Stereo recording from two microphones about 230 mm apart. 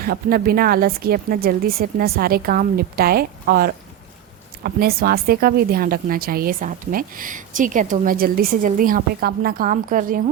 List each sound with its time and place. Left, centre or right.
0.0 s speech: right